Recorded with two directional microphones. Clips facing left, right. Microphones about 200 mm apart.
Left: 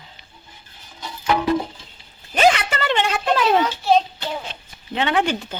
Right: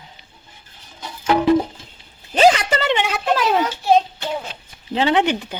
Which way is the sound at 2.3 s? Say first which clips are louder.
Right 3 dB; 30° right (ahead or behind).